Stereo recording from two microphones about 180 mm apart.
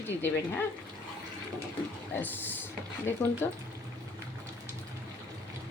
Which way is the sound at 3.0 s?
15° left (ahead or behind).